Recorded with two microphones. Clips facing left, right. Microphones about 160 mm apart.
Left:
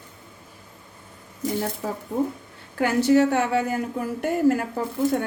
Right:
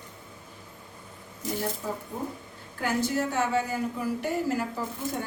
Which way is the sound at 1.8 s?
75° left (ahead or behind).